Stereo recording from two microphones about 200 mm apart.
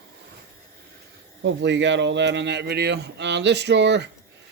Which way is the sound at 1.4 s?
65° right (ahead or behind).